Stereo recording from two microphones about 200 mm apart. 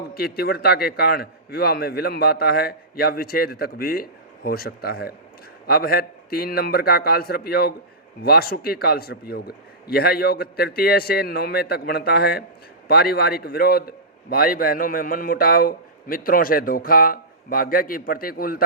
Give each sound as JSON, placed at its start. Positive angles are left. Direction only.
{"t": 0.1, "sound": "a man's voice", "side_deg": 50}